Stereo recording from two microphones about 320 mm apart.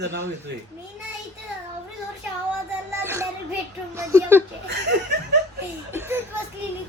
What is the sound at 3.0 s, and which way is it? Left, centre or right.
Music, centre.